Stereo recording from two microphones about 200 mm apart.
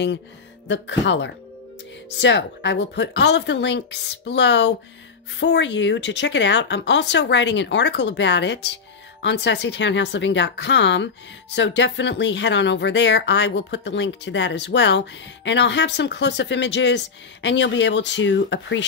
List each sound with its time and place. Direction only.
0.7 s speech: 65° left (ahead or behind)